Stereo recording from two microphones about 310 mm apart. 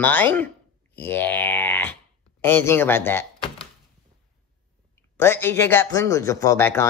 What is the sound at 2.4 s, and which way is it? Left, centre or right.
Speech, centre.